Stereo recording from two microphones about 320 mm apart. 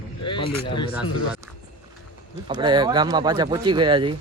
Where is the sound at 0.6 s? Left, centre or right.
Centre.